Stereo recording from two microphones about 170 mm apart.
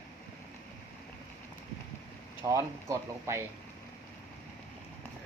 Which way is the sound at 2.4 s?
20° right (ahead or behind).